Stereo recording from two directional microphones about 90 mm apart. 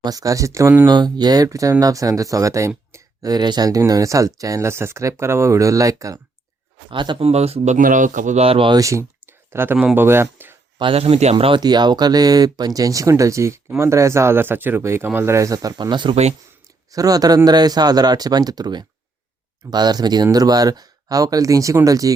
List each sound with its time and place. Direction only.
0.0 s speech: 45° right (ahead or behind)
0.9 s speech: 50° right (ahead or behind)
6.9 s speech: 60° right (ahead or behind)
8.4 s speech: 85° right
8.7 s speech: 35° right (ahead or behind)
9.5 s speech: 25° right (ahead or behind)
10.8 s speech: 80° right
11.6 s speech: 55° right (ahead or behind); by 15.4 s 25° right (ahead or behind)
15.4 s speech: 40° right (ahead or behind); by 16.1 s 60° right (ahead or behind)
16.9 s speech: 40° right (ahead or behind)